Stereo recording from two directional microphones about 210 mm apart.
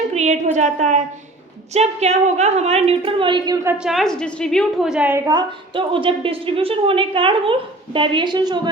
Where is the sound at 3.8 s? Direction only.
Centre (ahead or behind).